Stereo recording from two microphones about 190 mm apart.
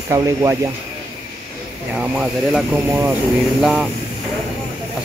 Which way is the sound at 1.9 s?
5° right (ahead or behind).